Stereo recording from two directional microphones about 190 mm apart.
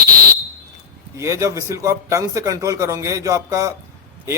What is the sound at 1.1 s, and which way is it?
A man's voice, 15° right (ahead or behind).